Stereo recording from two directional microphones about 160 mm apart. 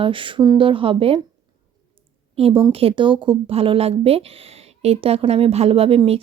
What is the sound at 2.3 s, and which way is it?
A woman's voice, 35° right (ahead or behind).